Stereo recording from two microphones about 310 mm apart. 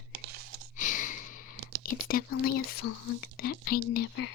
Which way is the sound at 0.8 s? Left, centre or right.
Left.